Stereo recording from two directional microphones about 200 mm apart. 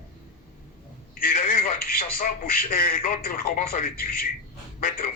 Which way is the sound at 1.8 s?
45° left (ahead or behind).